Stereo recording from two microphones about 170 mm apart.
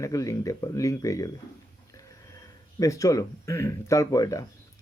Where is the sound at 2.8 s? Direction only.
20° left (ahead or behind).